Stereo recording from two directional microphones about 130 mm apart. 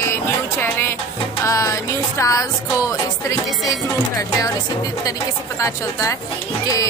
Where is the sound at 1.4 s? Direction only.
25° left (ahead or behind).